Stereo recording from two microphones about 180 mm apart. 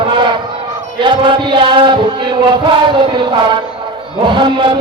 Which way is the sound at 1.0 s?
25° right (ahead or behind).